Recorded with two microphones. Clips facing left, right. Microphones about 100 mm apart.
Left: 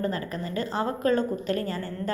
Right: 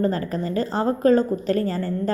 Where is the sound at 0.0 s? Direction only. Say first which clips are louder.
Right 6 dB; 35° right (ahead or behind).